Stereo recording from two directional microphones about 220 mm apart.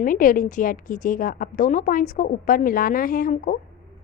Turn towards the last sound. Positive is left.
turn(degrees=40)  # may be behind; listen again after turning